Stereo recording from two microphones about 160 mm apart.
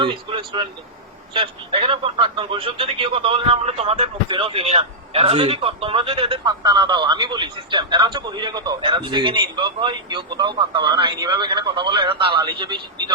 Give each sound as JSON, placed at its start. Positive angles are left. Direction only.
{"t": 0.0, "sound": "speech", "side_deg": -30}